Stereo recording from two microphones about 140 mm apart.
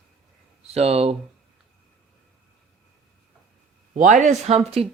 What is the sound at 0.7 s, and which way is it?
Speech, 45° right (ahead or behind).